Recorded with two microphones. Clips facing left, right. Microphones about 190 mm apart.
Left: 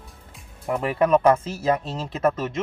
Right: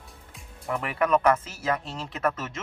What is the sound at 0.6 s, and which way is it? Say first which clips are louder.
Speech: left 5 dB; 20° left (ahead or behind).